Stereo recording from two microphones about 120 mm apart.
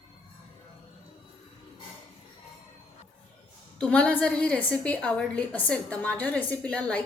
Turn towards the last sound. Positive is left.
turn(degrees=10)  # may be behind; listen again after turning